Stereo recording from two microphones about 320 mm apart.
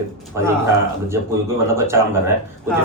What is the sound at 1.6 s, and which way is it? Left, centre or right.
Speech, centre.